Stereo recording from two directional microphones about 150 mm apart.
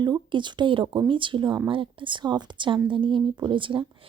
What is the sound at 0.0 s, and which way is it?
Speech, 30° right (ahead or behind).